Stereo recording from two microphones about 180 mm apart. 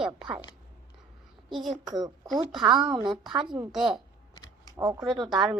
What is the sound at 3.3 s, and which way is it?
Speech, 25° right (ahead or behind).